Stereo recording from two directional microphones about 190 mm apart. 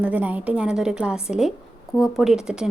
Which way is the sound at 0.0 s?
10° right (ahead or behind).